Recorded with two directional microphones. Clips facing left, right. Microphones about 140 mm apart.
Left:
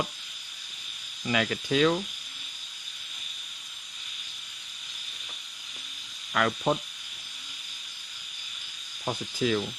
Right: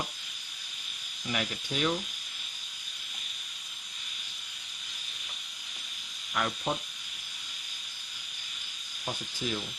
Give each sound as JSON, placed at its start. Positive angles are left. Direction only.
{"t": 1.3, "sound": "speech", "side_deg": 90}
{"t": 6.3, "sound": "speech", "side_deg": 90}
{"t": 9.0, "sound": "speech", "side_deg": 90}